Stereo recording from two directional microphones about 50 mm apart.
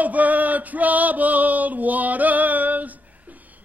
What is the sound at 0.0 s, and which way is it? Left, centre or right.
Male singing, right.